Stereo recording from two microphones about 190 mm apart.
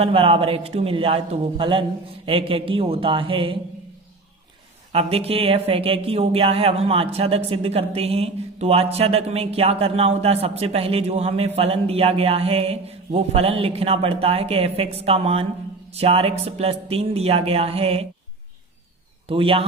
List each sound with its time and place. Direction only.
0.0 s a man's voice: 30° right (ahead or behind)
4.9 s speech: 30° right (ahead or behind)
19.3 s a man's voice: 30° right (ahead or behind)